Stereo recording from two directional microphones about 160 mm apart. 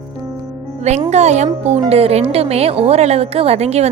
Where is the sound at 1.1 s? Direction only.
45° right (ahead or behind).